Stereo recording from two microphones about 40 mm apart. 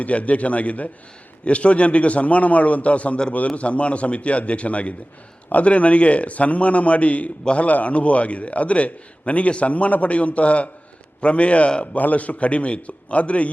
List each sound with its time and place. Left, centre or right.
0.0 s a man's voice: left